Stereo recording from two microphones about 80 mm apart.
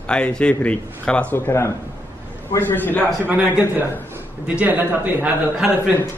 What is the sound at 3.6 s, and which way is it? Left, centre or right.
A man's voice, right.